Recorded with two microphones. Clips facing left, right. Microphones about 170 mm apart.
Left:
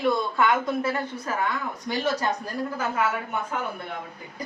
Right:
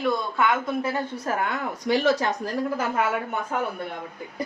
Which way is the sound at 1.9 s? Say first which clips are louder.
Right 7 dB; 85° right.